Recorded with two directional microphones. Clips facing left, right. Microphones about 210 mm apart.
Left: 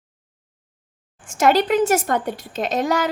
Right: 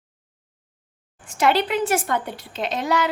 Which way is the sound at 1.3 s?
45° left (ahead or behind).